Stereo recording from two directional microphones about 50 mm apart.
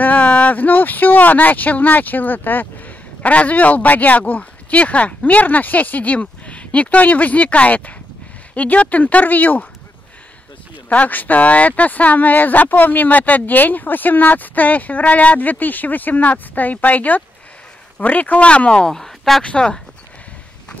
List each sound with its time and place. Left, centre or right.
0.0 s speech: left
10.9 s speech: left; by 19.4 s centre
19.4 s speech: centre